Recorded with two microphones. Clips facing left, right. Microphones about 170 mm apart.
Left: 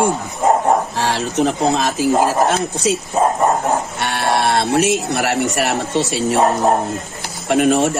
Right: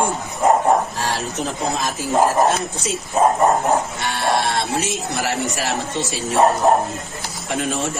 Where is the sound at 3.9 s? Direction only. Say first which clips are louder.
Left 2 dB; 65° left (ahead or behind).